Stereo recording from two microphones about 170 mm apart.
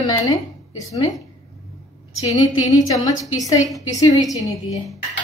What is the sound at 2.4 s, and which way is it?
A woman's voice, 20° left (ahead or behind).